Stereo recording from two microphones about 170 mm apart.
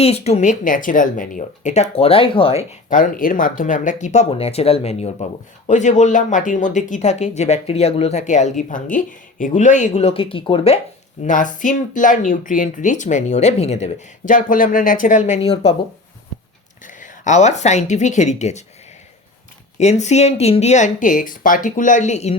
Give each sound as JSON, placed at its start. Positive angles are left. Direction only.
{"t": 0.0, "sound": "speech", "side_deg": 40}
{"t": 2.9, "sound": "speech", "side_deg": 55}
{"t": 11.2, "sound": "speech", "side_deg": 50}
{"t": 16.8, "sound": "speech", "side_deg": 50}
{"t": 19.8, "sound": "speech", "side_deg": 40}